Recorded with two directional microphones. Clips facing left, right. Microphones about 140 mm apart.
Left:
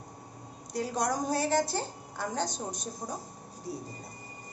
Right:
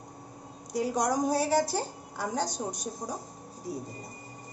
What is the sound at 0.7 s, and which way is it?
A woman's voice, 15° right (ahead or behind).